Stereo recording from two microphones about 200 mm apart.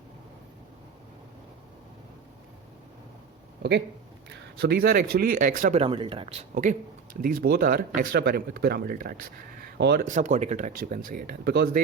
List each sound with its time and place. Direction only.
3.6 s a man's voice: 60° right (ahead or behind); by 5.8 s 40° right (ahead or behind)
5.8 s a man's voice: 25° right (ahead or behind); by 9.2 s 45° right (ahead or behind)
9.7 s speech: 60° right (ahead or behind)
10.0 s speech: 40° right (ahead or behind)